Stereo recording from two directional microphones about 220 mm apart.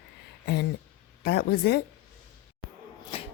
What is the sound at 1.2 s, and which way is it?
Speech, 45° left (ahead or behind).